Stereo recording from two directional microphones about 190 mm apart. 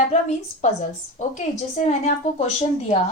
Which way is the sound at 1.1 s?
40° left (ahead or behind).